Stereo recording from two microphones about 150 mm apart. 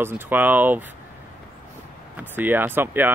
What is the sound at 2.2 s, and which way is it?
Speech, 15° right (ahead or behind).